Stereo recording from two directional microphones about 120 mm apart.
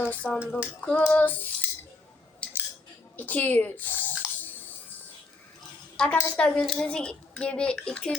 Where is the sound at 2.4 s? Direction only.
10° left (ahead or behind).